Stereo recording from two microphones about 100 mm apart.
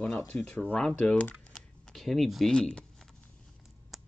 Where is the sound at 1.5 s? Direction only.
5° left (ahead or behind).